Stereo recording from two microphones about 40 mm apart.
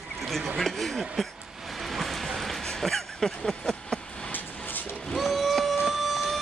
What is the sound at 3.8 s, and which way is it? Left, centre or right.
Vehicle, left.